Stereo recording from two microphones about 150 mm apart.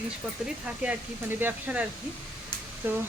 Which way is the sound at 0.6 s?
10° right (ahead or behind).